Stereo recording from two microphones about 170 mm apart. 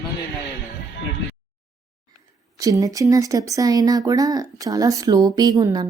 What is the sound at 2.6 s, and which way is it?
Speech, 20° right (ahead or behind).